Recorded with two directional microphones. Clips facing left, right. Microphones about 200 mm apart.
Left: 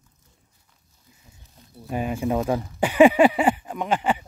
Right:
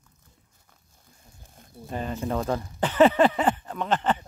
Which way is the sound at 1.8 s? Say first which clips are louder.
Left 5 dB; 10° left (ahead or behind).